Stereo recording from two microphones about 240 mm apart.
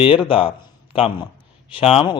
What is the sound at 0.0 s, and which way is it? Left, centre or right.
A man's voice, left.